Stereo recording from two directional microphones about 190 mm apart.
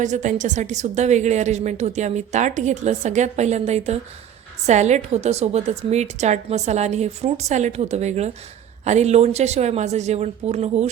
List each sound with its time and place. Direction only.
0.0 s a woman's voice: 40° right (ahead or behind)